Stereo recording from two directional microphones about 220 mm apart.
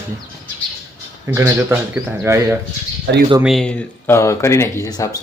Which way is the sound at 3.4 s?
Centre (ahead or behind).